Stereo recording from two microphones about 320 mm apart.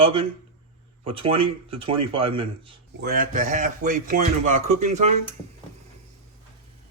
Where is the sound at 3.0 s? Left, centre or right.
Right.